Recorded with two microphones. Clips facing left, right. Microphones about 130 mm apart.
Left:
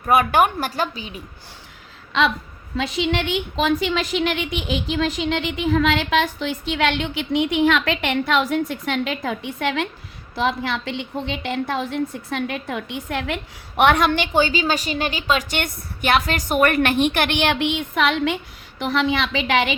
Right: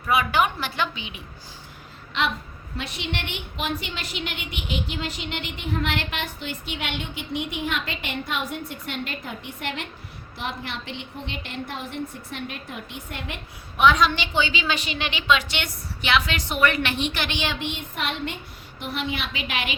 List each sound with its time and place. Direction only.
0.0 s a woman's voice: 50° left (ahead or behind)
2.7 s a woman's voice: 90° left